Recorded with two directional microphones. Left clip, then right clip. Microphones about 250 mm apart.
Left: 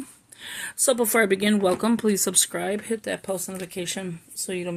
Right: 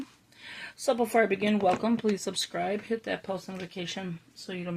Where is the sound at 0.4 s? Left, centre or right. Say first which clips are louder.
Left 5 dB; left.